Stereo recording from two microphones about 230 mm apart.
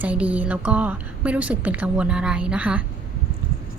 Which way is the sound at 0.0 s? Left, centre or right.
Centre.